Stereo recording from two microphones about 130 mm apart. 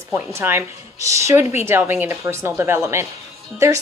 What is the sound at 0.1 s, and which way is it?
A woman's voice, 15° right (ahead or behind).